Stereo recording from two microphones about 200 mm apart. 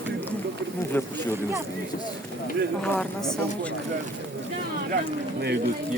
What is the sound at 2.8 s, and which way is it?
Speech, 5° left (ahead or behind).